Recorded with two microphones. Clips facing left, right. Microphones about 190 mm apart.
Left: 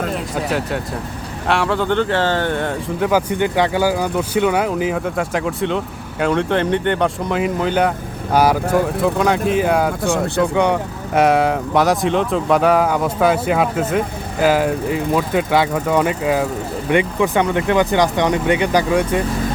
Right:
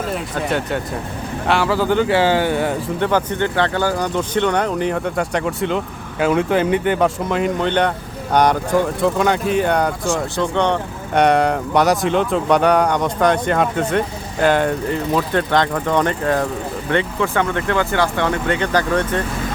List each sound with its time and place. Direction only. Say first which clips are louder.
0.1 s speech: even; centre (ahead or behind)
3.0 s speech: left 2 dB; 5° left (ahead or behind)